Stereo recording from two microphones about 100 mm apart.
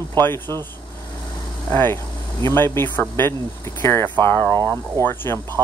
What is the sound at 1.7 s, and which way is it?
Speech, 25° left (ahead or behind).